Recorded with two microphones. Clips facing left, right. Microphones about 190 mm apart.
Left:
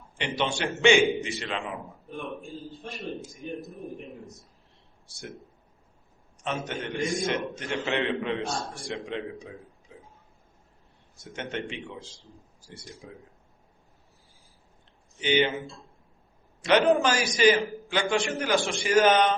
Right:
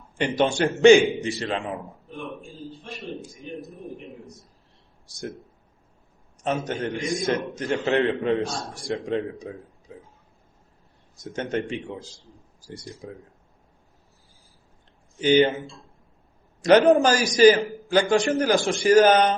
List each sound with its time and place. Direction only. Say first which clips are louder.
0.2 s a man's voice: right 7 dB; 45° right (ahead or behind)
6.4 s a man's voice: right 6 dB; 40° right (ahead or behind)
11.2 s a man's voice: right 7 dB; 40° right (ahead or behind)
13.0 s a man's voice: right 7 dB; 40° right (ahead or behind)
15.2 s a man's voice: right 6 dB; 40° right (ahead or behind)
16.6 s a man's voice: right 6 dB; 40° right (ahead or behind)